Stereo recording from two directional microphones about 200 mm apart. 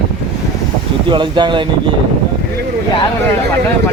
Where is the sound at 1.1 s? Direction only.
25° right (ahead or behind).